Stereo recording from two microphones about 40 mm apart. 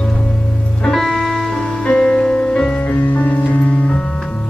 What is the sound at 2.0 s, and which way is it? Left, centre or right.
Music, centre.